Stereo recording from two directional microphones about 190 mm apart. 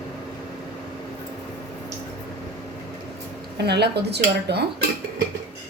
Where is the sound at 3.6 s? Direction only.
60° right (ahead or behind).